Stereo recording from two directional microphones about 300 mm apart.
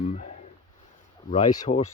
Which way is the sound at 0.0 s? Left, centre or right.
Left.